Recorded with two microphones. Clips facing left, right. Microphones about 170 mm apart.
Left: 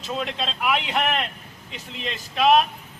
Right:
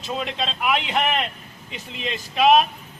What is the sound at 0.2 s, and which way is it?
Speech, centre (ahead or behind).